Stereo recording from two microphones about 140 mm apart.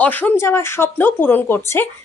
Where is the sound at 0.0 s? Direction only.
10° left (ahead or behind).